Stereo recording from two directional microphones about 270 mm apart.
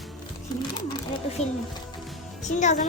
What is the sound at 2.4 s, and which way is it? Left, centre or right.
Speech, left.